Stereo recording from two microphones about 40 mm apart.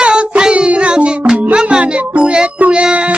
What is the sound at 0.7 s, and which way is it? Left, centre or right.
Music, right.